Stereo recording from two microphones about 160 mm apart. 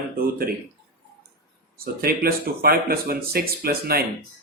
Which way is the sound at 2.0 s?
75° right (ahead or behind).